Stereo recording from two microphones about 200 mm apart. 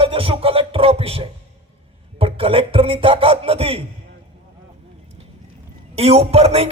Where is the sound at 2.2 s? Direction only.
30° right (ahead or behind).